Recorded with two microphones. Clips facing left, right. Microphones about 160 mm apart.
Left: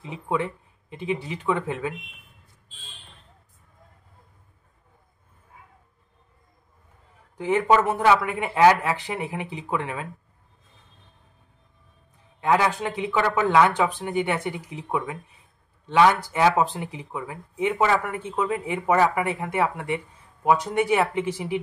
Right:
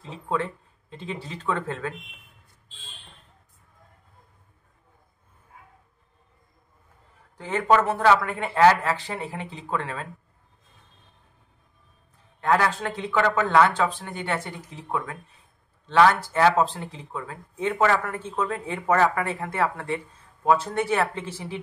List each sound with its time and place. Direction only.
0.0 s speech: 15° left (ahead or behind)
7.3 s speech: 15° left (ahead or behind)
12.4 s speech: 15° left (ahead or behind)